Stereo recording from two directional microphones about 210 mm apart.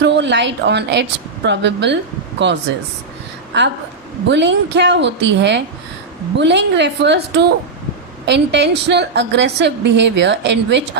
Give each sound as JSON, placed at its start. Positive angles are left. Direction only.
{"t": 0.0, "sound": "a woman's voice", "side_deg": -55}
{"t": 3.5, "sound": "a woman's voice", "side_deg": -55}